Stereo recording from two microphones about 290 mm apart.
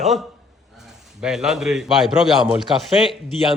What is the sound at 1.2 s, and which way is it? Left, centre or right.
A man's voice, centre.